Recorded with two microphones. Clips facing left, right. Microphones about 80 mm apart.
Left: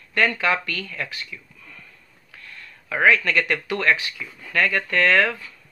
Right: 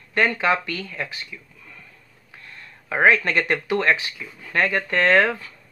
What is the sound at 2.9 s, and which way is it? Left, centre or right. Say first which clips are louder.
Speech: right 1 dB; right.